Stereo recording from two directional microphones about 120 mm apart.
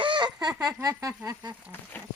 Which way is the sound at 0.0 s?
45° right (ahead or behind).